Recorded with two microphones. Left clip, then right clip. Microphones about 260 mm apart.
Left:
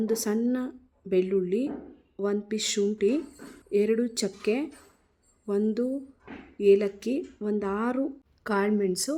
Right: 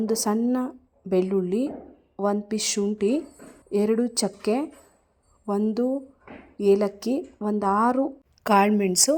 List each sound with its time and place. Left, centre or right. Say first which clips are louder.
0.0 s speech: right 3 dB; centre